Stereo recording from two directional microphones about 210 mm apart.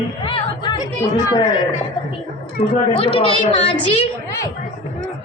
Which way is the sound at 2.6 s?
25° left (ahead or behind).